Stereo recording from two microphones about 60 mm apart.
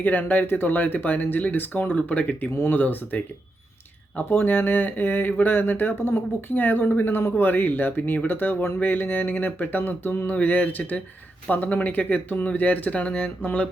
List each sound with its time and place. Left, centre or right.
0.0 s speech: left